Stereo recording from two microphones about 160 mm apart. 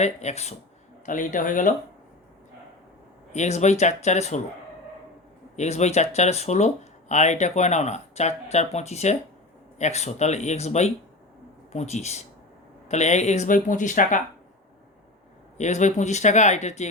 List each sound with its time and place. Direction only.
0.0 s speech: 45° left (ahead or behind)
1.0 s a man's voice: 55° left (ahead or behind)
3.3 s speech: 45° left (ahead or behind)
5.5 s speech: 45° left (ahead or behind)
15.5 s speech: 45° left (ahead or behind)